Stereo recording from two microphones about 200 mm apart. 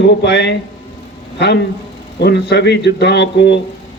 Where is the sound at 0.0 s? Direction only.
60° left (ahead or behind).